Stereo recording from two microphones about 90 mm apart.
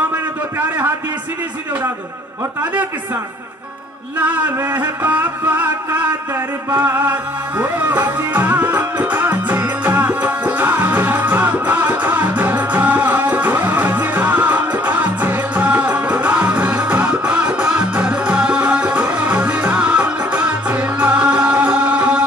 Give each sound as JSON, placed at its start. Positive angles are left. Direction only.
{"t": 2.6, "sound": "music", "side_deg": -20}
{"t": 4.2, "sound": "music", "side_deg": -20}